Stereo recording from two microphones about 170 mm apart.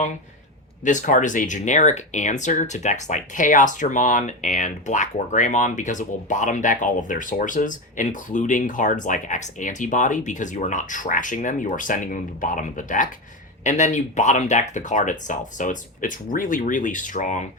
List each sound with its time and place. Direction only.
0.9 s speech: 50° left (ahead or behind)